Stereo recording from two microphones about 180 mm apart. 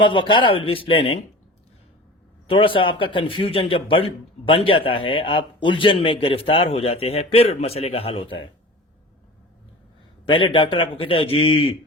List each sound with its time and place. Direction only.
0.0 s a man's voice: 25° left (ahead or behind)
2.5 s a man's voice: 30° left (ahead or behind)
10.2 s a man's voice: 30° left (ahead or behind)